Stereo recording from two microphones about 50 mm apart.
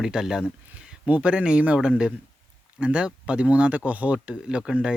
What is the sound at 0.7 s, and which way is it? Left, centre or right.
Speech, right.